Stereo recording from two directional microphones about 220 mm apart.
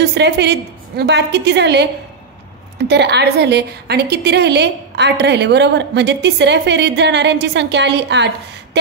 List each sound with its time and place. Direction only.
0.0 s a woman's voice: 50° right (ahead or behind)
2.9 s a woman's voice: 50° right (ahead or behind)